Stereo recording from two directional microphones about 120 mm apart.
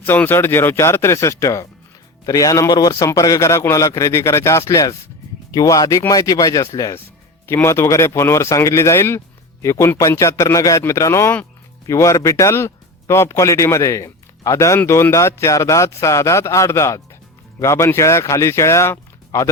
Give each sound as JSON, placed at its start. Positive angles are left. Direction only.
{"t": 0.0, "sound": "speech", "side_deg": 15}